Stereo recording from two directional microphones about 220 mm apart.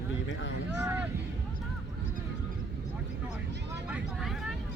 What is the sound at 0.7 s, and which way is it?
Speech, 10° right (ahead or behind).